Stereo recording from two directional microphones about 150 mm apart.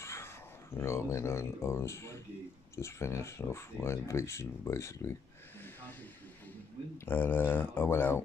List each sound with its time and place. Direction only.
0.0 s speech: 15° left (ahead or behind)
7.1 s speech: 15° left (ahead or behind)